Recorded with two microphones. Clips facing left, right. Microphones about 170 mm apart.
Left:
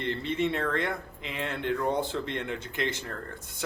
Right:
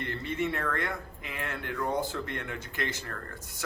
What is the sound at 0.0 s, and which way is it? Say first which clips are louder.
Speech: left 3 dB; 25° left (ahead or behind).